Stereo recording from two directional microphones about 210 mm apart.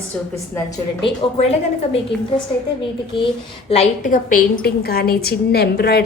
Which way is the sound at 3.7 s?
35° left (ahead or behind).